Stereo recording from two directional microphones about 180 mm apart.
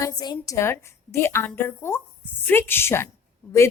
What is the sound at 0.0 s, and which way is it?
A woman's voice, 20° left (ahead or behind).